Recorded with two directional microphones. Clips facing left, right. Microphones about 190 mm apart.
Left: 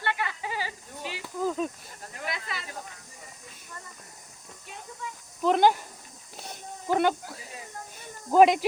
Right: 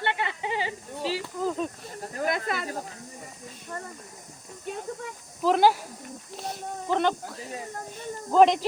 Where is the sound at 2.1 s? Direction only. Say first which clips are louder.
Right 8 dB; 45° right (ahead or behind).